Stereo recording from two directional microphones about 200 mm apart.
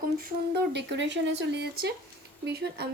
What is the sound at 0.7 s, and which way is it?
Speech, 60° right (ahead or behind).